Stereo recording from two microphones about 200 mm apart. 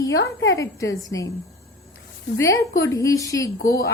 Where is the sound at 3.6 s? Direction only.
50° left (ahead or behind).